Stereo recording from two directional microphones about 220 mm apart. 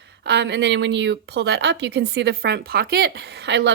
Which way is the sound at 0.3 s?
50° right (ahead or behind).